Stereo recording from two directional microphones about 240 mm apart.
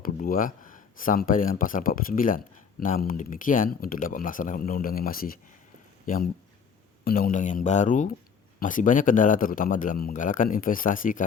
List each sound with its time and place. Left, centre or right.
0.0 s a man's voice: left
7.0 s a man's voice: left